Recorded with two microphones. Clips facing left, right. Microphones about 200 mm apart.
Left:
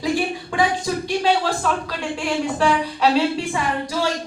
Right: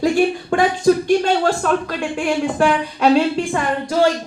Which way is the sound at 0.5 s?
50° right (ahead or behind).